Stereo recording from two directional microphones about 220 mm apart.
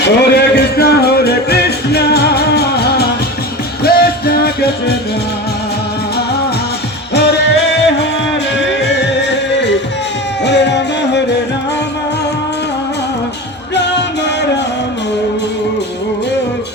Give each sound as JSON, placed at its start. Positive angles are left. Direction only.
{"t": 0.0, "sound": "music", "side_deg": 50}
{"t": 7.1, "sound": "music", "side_deg": 50}
{"t": 13.7, "sound": "music", "side_deg": 50}